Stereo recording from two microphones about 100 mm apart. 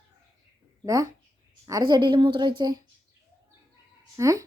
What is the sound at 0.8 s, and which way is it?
Speech, 35° right (ahead or behind).